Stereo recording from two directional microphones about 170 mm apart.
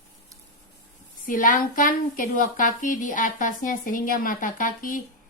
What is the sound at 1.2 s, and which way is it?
A woman's voice, 55° left (ahead or behind).